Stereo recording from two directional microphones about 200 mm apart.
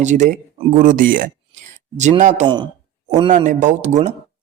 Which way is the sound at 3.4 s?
35° right (ahead or behind).